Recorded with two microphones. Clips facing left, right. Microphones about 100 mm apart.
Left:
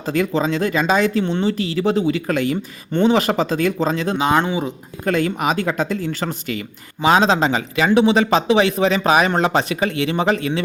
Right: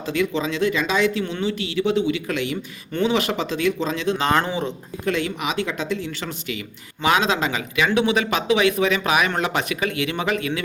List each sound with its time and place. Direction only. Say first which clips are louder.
0.0 s speech: left 4 dB; 40° left (ahead or behind)
4.2 s speech: left 4 dB; 10° left (ahead or behind)
5.0 s speech: left 5 dB; 45° left (ahead or behind)
7.0 s speech: left 5 dB; 30° left (ahead or behind)